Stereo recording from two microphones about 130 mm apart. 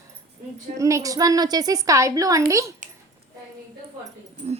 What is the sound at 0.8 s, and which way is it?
A woman's voice, 25° right (ahead or behind).